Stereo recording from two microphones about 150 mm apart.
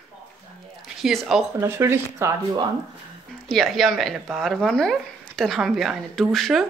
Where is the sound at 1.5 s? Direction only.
15° right (ahead or behind).